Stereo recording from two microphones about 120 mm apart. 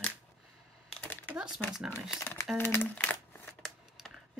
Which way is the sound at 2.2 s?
15° left (ahead or behind).